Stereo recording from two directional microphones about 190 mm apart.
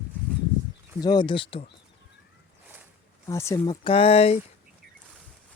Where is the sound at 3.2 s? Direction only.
15° left (ahead or behind).